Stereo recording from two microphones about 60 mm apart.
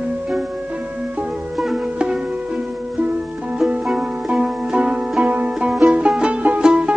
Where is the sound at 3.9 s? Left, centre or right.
Centre.